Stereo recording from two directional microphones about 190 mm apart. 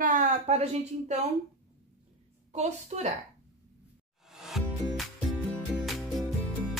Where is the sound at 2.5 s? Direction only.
35° right (ahead or behind).